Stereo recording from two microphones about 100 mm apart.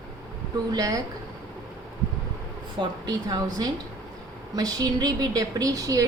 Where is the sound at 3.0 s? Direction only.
40° right (ahead or behind).